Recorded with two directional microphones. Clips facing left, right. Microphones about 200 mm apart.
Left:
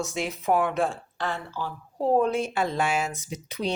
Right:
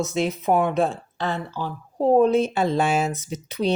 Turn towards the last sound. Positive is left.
turn(degrees=-25)  # may be behind; listen again after turning